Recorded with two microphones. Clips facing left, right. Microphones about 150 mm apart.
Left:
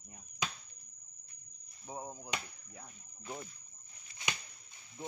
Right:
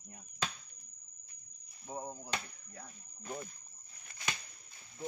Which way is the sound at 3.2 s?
45° right (ahead or behind).